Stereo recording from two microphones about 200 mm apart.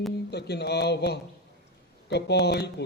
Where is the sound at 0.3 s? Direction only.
55° left (ahead or behind).